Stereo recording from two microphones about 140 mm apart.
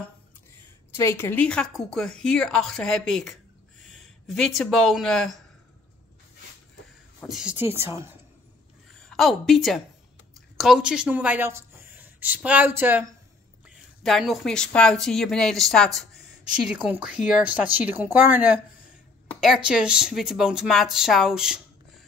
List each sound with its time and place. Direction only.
0.9 s speech: 15° left (ahead or behind)
7.2 s a woman's voice: centre (ahead or behind)
7.5 s speech: 20° right (ahead or behind)
8.9 s a woman's voice: centre (ahead or behind); by 13.1 s 15° right (ahead or behind)
13.7 s speech: centre (ahead or behind)
16.6 s speech: 10° right (ahead or behind)